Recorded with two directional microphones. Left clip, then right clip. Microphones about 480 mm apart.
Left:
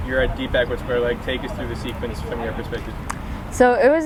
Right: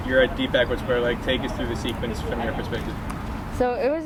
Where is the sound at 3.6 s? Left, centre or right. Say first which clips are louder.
Left 8 dB; left.